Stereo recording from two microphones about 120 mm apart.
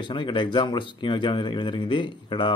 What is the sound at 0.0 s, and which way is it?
Speech, 45° left (ahead or behind).